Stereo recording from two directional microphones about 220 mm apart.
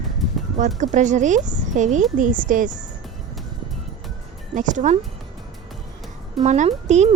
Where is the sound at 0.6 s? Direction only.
35° right (ahead or behind).